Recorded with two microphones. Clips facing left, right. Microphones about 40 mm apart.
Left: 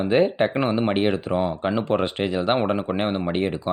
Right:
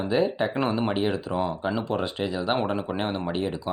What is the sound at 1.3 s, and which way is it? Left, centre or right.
Speech, left.